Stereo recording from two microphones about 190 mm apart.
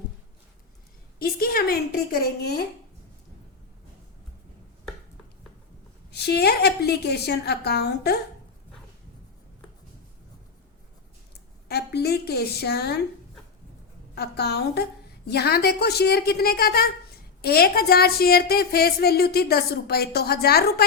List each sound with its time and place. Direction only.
1.2 s a sound: 50° left (ahead or behind)
2.1 s a woman's voice: 55° left (ahead or behind)
6.1 s a woman's voice: 60° left (ahead or behind)
11.7 s a woman's voice: 55° left (ahead or behind)
14.2 s a woman's voice: 60° left (ahead or behind)